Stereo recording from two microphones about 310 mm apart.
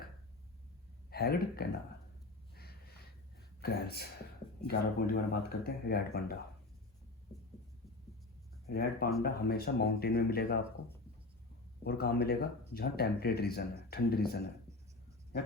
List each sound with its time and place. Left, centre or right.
1.1 s speech: left
2.6 s snort: left
3.6 s speech: left
8.6 s speech: left
11.8 s speech: left